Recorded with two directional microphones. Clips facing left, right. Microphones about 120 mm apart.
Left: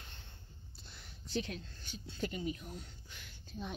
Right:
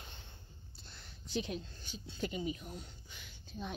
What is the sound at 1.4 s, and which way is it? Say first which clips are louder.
Speech: right 3 dB; 5° right (ahead or behind).